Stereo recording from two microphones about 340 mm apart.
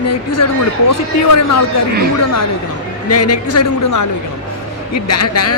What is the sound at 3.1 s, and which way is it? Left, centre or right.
A man's voice, left.